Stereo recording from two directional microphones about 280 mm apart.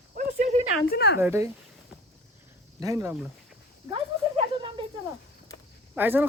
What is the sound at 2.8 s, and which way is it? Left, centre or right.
Speech, centre.